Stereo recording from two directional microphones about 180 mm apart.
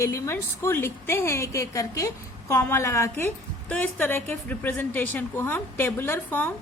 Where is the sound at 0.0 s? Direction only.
15° left (ahead or behind).